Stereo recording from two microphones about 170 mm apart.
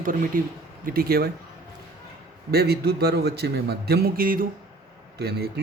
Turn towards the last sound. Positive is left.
turn(degrees=-65)  # may be behind; listen again after turning